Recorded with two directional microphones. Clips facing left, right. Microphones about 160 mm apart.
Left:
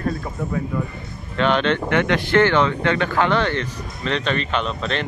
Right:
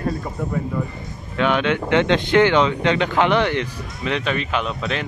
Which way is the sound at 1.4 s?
5° right (ahead or behind).